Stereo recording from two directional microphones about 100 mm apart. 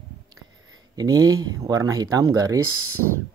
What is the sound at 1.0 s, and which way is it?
Speech, 35° right (ahead or behind).